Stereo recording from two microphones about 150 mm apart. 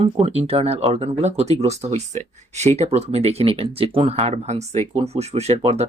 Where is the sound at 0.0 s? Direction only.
45° right (ahead or behind).